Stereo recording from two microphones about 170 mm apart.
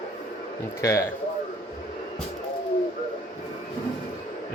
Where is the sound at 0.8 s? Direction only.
20° left (ahead or behind).